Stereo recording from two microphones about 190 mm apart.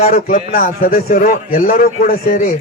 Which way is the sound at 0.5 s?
50° left (ahead or behind).